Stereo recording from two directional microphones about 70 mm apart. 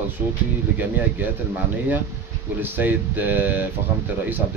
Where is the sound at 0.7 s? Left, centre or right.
Right.